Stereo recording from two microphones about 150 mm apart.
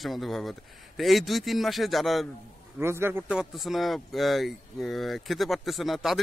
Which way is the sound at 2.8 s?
15° right (ahead or behind).